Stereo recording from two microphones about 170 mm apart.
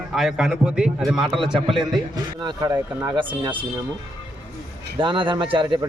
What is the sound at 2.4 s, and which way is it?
Speech, 25° right (ahead or behind).